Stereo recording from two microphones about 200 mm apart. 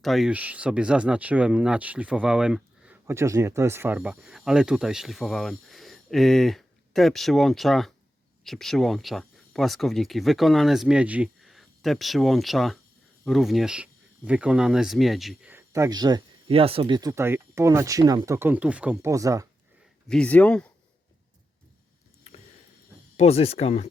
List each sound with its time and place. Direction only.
0.0 s speech: centre (ahead or behind); by 19.5 s 15° right (ahead or behind)
20.1 s speech: 5° left (ahead or behind)
23.1 s speech: 30° left (ahead or behind)